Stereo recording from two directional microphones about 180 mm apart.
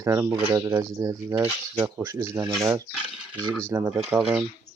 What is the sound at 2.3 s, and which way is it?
Speech, 5° right (ahead or behind).